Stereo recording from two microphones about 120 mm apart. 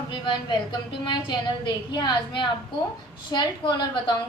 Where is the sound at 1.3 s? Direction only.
40° left (ahead or behind).